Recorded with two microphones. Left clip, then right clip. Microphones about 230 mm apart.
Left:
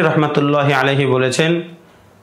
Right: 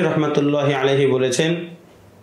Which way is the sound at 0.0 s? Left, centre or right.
Left.